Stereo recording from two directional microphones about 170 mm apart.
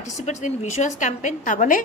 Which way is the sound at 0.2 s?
45° left (ahead or behind).